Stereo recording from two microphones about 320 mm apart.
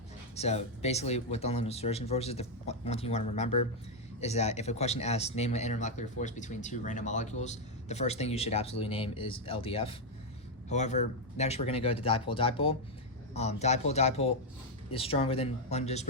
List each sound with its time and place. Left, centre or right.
0.3 s speech: centre